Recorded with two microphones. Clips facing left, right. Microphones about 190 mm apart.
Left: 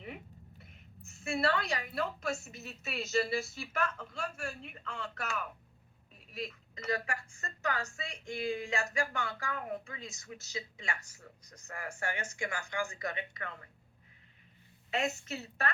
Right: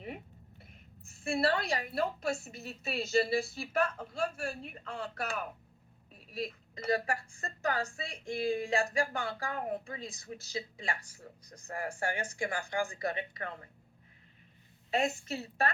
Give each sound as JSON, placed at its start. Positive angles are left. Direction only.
{"t": 1.0, "sound": "a woman's voice", "side_deg": -30}
{"t": 14.8, "sound": "a woman's voice", "side_deg": -30}